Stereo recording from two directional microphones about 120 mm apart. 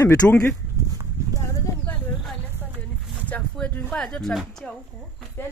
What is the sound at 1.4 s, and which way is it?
Horse, 20° left (ahead or behind).